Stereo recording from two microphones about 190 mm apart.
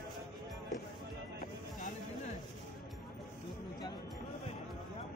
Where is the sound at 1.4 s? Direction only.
45° left (ahead or behind).